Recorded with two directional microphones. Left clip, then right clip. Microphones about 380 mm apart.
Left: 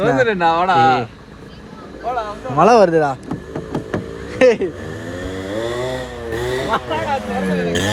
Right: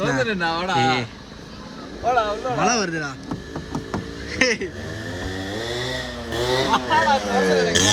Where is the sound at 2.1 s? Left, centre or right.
Right.